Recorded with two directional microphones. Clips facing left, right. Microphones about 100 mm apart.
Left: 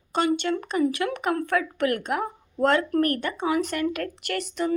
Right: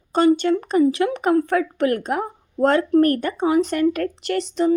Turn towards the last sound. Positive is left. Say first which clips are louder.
# right 7 dB
turn(degrees=-30)  # may be behind; listen again after turning